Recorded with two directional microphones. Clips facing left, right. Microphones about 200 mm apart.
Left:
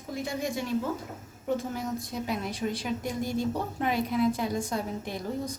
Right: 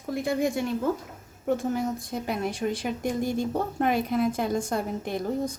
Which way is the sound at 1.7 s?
50° right (ahead or behind).